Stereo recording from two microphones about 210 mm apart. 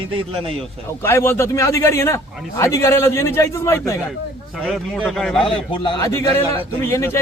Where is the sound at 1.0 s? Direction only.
10° left (ahead or behind).